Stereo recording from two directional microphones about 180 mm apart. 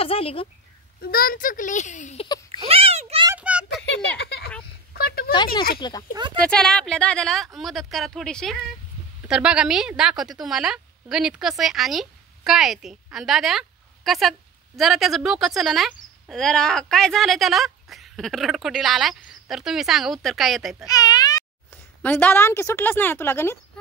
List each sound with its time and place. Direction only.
0.0 s speech: 30° left (ahead or behind)
1.0 s speech: 55° left (ahead or behind)
2.2 s baby cry: 25° left (ahead or behind)
2.6 s a sound: 30° right (ahead or behind)
3.3 s a sound: 5° right (ahead or behind)
3.6 s a sound: 75° left (ahead or behind); by 5.3 s 60° left (ahead or behind)
5.8 s speech: 25° left (ahead or behind)
6.3 s a woman's voice: 5° left (ahead or behind)
20.8 s speech: 20° left (ahead or behind)
22.0 s speech: 10° left (ahead or behind)